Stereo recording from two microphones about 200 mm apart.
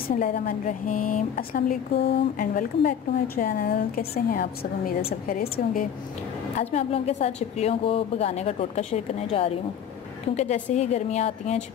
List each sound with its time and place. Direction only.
0.1 s a woman's voice: 45° left (ahead or behind)
6.6 s a woman's voice: 30° left (ahead or behind)